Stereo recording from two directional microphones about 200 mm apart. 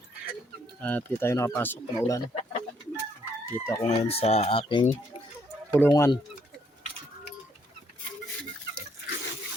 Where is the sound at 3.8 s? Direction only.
30° left (ahead or behind).